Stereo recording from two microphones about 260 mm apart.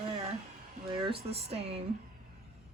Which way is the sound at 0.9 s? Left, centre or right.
Centre.